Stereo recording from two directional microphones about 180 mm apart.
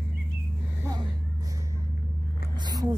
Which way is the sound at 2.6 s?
25° right (ahead or behind).